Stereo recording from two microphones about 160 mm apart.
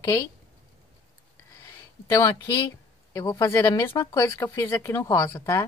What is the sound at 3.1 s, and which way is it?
Speech, 20° left (ahead or behind).